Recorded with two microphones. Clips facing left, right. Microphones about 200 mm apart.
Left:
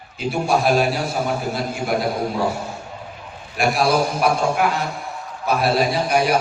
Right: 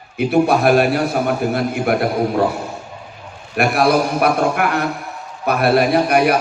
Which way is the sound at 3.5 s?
60° right (ahead or behind).